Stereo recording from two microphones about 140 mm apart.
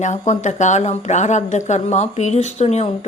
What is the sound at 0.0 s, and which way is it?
A woman's voice, 60° left (ahead or behind).